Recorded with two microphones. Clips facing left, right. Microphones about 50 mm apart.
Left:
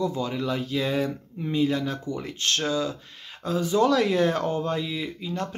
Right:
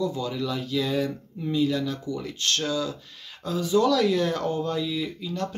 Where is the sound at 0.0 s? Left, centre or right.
Left.